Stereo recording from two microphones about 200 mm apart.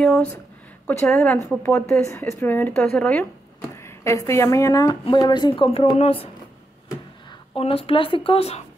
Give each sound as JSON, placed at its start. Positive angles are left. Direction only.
{"t": 0.0, "sound": "a woman's voice", "side_deg": 5}
{"t": 7.5, "sound": "a woman's voice", "side_deg": 30}